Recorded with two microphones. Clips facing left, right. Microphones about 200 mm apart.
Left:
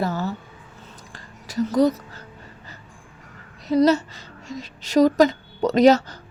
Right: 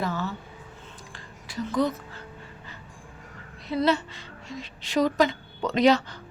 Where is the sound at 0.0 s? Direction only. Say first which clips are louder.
Left 4 dB; 40° left (ahead or behind).